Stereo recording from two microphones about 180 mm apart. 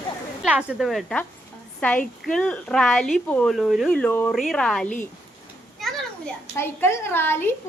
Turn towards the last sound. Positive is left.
turn(degrees=10)  # may be behind; listen again after turning